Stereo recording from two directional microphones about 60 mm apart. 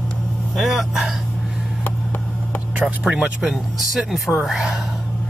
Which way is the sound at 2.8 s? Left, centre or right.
Centre.